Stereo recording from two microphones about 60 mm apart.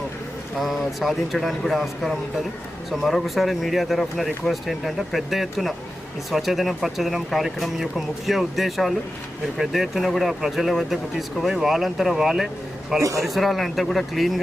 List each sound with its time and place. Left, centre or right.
0.6 s speech: centre
13.0 s speech: right
13.2 s speech: centre